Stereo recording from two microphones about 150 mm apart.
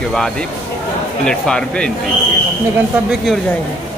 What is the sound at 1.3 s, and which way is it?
Speech, 5° left (ahead or behind).